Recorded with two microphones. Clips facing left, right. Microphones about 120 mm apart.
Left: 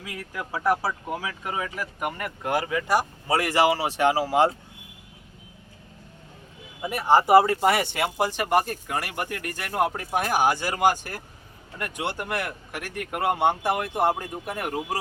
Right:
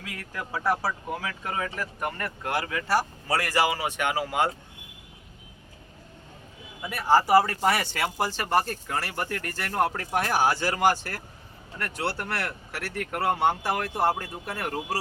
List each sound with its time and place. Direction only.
0.0 s speech: 15° left (ahead or behind); by 4.5 s 30° left (ahead or behind)
6.8 s speech: 20° left (ahead or behind)